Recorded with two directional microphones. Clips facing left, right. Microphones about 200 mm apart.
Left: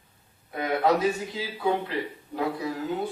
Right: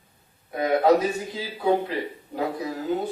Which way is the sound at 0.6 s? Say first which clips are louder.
Right 4 dB; 40° right (ahead or behind).